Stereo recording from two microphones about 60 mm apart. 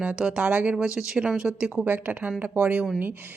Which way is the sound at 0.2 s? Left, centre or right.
Centre.